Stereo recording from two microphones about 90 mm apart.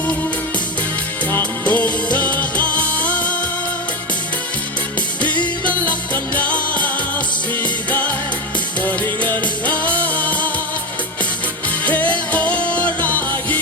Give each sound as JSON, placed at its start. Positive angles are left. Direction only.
{"t": 1.3, "sound": "music", "side_deg": 15}
{"t": 5.4, "sound": "music", "side_deg": 15}
{"t": 11.9, "sound": "music", "side_deg": 15}